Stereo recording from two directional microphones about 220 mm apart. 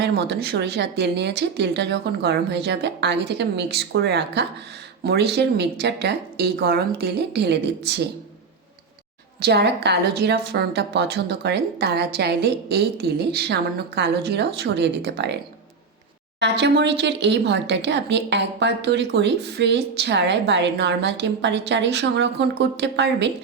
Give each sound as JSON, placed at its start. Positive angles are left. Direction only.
{"t": 0.0, "sound": "speech", "side_deg": -45}
{"t": 9.4, "sound": "speech", "side_deg": -50}
{"t": 16.4, "sound": "speech", "side_deg": -50}